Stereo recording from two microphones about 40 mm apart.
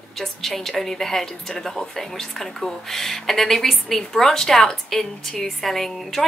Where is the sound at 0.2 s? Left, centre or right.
Centre.